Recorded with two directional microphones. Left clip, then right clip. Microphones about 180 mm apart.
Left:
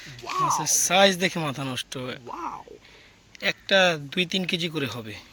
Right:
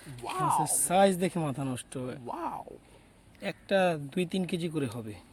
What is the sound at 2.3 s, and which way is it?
Speech, 55° right (ahead or behind).